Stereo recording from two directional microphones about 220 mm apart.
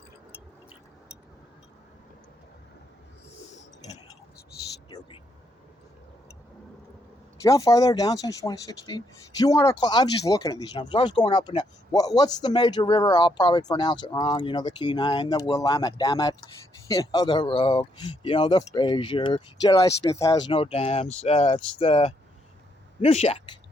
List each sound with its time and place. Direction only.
4.9 s a sound: 20° left (ahead or behind)
7.4 s speech: 15° left (ahead or behind)
20.5 s speech: 25° left (ahead or behind)